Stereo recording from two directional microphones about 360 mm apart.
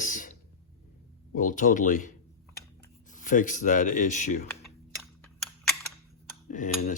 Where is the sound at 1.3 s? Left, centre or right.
Left.